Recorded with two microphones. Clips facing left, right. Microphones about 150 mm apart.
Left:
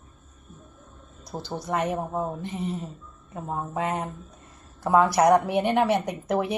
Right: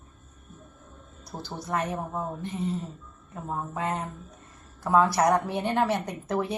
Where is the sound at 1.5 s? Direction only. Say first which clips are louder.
Left 3 dB; 25° left (ahead or behind).